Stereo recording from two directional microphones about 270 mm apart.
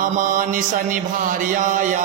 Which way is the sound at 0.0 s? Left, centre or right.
Right.